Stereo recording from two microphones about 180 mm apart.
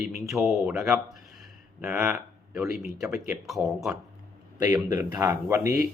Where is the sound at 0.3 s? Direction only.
Centre (ahead or behind).